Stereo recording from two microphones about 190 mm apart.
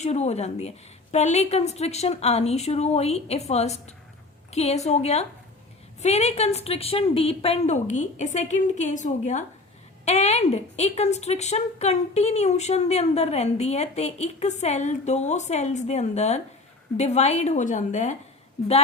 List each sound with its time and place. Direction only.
0.0 s a woman's voice: 35° left (ahead or behind)